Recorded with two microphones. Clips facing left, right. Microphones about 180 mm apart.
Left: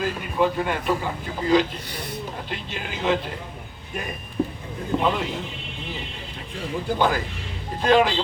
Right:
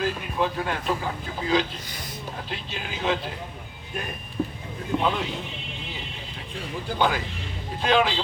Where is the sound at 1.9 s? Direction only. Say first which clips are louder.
Left 6 dB; 65° left (ahead or behind).